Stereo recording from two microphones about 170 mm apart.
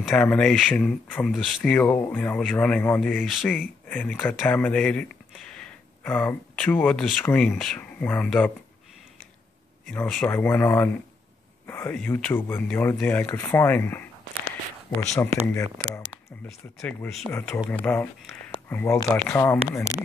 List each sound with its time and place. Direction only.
0.0 s speech: 5° left (ahead or behind)
9.8 s speech: 5° left (ahead or behind)
16.4 s speech: 5° left (ahead or behind)